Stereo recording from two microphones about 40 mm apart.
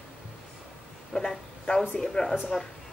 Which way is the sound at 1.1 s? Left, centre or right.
Centre.